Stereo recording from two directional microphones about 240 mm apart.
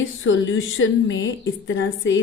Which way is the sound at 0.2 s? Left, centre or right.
Left.